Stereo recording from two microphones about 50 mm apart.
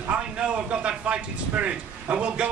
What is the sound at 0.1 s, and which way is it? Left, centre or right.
A man's voice, right.